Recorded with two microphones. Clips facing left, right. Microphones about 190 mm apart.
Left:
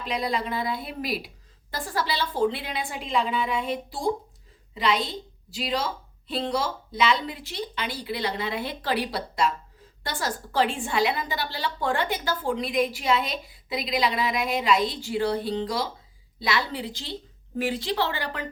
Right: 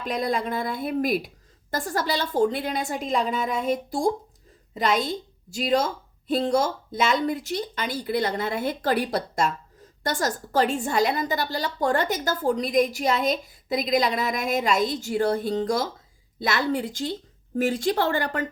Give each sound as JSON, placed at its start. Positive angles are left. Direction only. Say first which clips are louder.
{"t": 0.0, "sound": "a woman's voice", "louder": "right 2 dB", "side_deg": -45}